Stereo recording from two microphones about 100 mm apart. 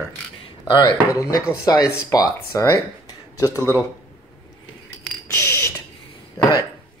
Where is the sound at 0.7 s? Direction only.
50° left (ahead or behind).